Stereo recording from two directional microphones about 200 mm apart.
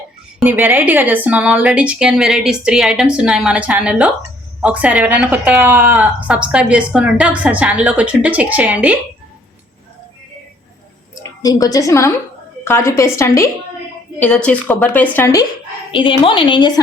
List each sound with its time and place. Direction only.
0.4 s a woman's voice: 10° right (ahead or behind)
11.2 s a woman's voice: 15° left (ahead or behind)
15.9 s a woman's voice: 25° left (ahead or behind)